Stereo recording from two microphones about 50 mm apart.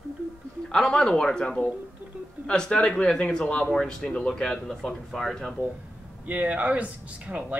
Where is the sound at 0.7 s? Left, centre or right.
Centre.